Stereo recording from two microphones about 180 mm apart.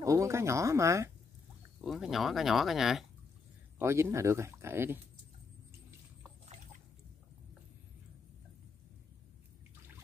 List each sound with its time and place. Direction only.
0.0 s speech: 15° right (ahead or behind)
1.8 s speech: centre (ahead or behind)
3.7 s speech: 15° right (ahead or behind)